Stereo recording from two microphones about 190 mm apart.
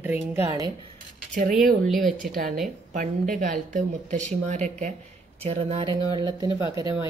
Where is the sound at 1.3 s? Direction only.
45° right (ahead or behind).